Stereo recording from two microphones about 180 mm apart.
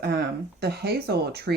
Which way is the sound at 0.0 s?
60° right (ahead or behind).